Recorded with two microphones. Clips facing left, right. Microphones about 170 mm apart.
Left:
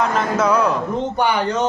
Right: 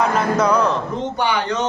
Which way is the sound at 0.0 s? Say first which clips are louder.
Right 1 dB; centre (ahead or behind).